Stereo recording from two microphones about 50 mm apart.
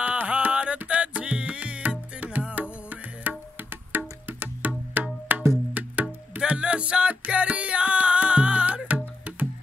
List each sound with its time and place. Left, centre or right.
0.0 s music: right